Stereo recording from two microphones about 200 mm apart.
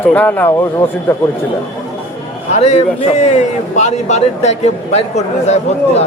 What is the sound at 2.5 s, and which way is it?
A man's voice, 35° left (ahead or behind).